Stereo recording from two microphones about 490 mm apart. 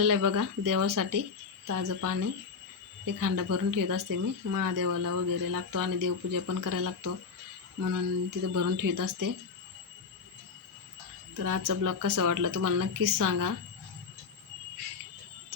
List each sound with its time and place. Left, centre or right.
0.0 s speech: right
11.4 s speech: right